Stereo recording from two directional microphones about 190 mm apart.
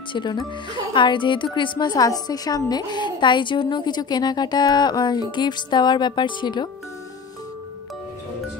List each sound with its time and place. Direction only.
0.1 s a woman's voice: 25° left (ahead or behind)